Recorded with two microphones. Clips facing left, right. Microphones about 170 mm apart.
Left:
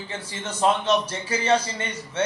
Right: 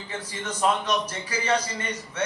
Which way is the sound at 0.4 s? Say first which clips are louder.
Left 3 dB; 25° left (ahead or behind).